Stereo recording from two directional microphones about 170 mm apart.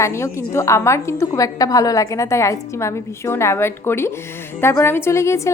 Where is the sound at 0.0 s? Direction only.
15° left (ahead or behind).